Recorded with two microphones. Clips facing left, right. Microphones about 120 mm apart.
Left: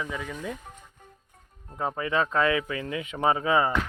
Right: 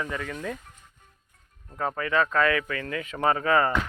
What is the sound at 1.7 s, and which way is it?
Speech, 20° left (ahead or behind).